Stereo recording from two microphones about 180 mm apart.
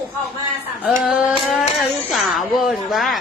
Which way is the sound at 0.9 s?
5° right (ahead or behind).